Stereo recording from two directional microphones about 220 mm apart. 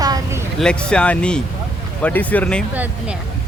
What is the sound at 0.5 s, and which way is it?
Speech, 5° left (ahead or behind).